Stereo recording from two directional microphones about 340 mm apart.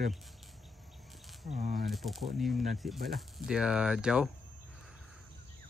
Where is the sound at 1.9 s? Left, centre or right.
Centre.